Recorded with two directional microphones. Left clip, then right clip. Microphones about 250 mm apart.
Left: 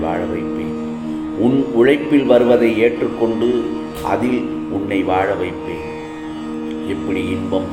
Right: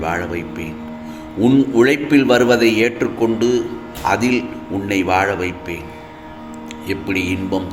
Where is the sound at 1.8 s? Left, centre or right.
Right.